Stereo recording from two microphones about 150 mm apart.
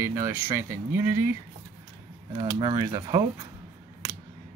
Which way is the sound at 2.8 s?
25° right (ahead or behind).